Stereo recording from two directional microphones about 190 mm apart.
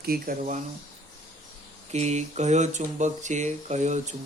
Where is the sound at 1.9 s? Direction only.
35° right (ahead or behind).